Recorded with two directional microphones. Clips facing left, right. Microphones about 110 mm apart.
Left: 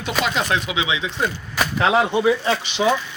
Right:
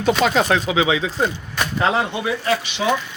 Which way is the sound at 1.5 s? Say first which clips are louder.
Left 2 dB; 5° left (ahead or behind).